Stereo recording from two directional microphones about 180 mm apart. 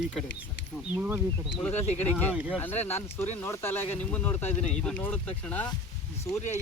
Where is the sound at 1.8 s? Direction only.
40° left (ahead or behind).